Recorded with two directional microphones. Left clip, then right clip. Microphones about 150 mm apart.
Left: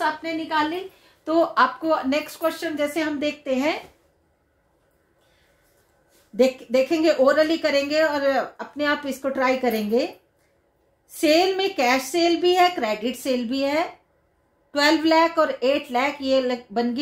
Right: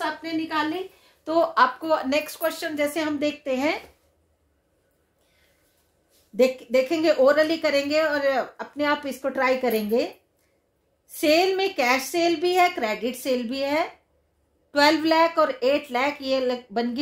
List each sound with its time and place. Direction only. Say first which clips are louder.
0.0 s a woman's voice: left 3 dB; 15° right (ahead or behind)
1.2 s a woman's voice: left 1 dB; 35° right (ahead or behind)
6.3 s a woman's voice: left 1 dB; 40° right (ahead or behind)
11.1 s a woman's voice: left 1 dB; 40° right (ahead or behind)